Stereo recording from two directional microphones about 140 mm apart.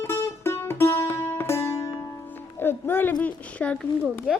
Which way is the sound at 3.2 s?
10° left (ahead or behind).